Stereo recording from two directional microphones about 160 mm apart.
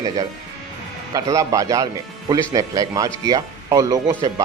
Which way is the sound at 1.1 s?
20° right (ahead or behind).